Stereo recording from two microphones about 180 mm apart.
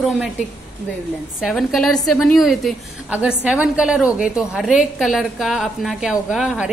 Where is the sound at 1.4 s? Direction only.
Centre (ahead or behind).